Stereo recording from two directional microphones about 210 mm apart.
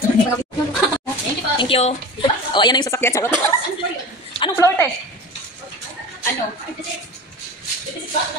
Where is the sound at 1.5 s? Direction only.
25° left (ahead or behind).